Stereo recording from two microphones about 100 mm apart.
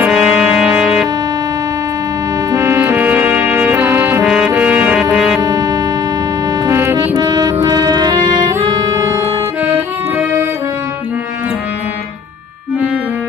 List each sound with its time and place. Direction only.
0.0 s music: 10° right (ahead or behind)
2.5 s music: 30° right (ahead or behind)
4.3 s brass instrument: 10° right (ahead or behind)
4.6 s music: 20° right (ahead or behind)
5.1 s music: 5° right (ahead or behind)
5.4 s music: 35° right (ahead or behind)
6.7 s music: 25° right (ahead or behind)
7.2 s music: 40° right (ahead or behind)
8.0 s music: 50° right (ahead or behind)
8.5 s music: 30° right (ahead or behind)